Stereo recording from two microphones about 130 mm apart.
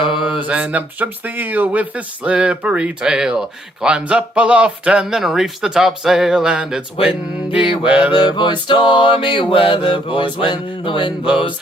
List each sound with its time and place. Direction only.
0.0 s mantra: 40° left (ahead or behind)
0.4 s speech: 10° right (ahead or behind)
7.9 s speech: 10° right (ahead or behind)
8.1 s mantra: 35° left (ahead or behind)